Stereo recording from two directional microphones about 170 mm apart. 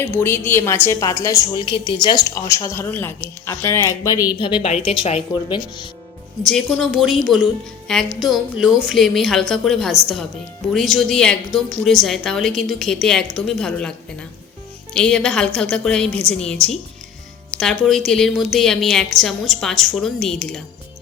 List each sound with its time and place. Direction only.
0.0 s a woman's voice: 15° left (ahead or behind); by 5.5 s 35° left (ahead or behind)
6.4 s a woman's voice: 5° left (ahead or behind)
17.6 s a woman's voice: centre (ahead or behind)